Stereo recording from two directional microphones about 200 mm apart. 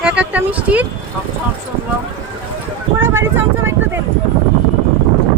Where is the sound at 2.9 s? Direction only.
10° right (ahead or behind).